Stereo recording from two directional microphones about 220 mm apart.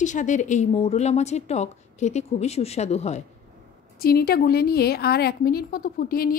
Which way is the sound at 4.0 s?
45° left (ahead or behind).